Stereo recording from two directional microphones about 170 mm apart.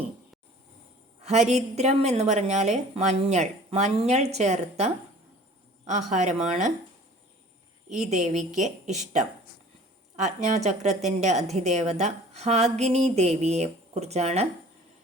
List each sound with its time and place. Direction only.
1.2 s a woman's voice: 40° right (ahead or behind)
8.0 s a woman's voice: 45° right (ahead or behind)